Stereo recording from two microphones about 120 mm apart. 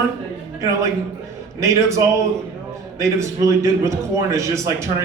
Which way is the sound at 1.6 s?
25° right (ahead or behind).